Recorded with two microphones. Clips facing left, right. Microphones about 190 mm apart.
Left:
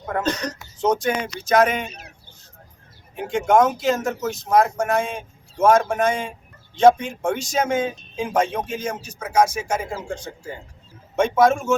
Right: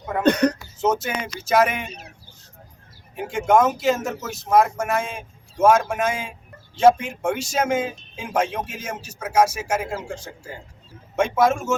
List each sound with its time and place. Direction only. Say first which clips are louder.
0.2 s speech: right 8 dB; 60° right (ahead or behind)
0.8 s speech: left 3 dB; 5° right (ahead or behind)
3.2 s speech: left 1 dB; 5° right (ahead or behind)
11.2 s speech: left 2 dB; 5° right (ahead or behind)